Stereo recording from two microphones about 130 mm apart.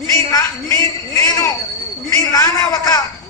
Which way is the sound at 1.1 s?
25° left (ahead or behind).